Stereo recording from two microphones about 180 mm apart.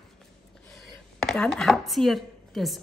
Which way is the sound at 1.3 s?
5° left (ahead or behind).